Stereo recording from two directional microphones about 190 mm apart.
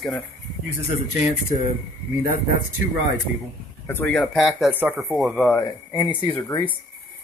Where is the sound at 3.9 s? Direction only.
10° left (ahead or behind).